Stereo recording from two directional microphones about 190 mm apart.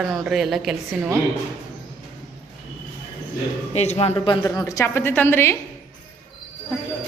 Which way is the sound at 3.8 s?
35° left (ahead or behind).